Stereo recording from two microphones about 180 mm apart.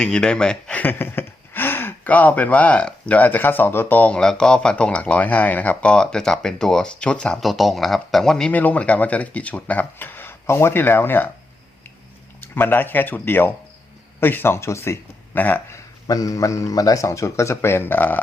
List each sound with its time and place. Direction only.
0.0 s speech: 5° left (ahead or behind)
12.4 s speech: 10° left (ahead or behind)